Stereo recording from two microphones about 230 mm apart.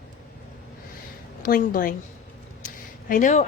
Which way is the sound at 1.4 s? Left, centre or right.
Left.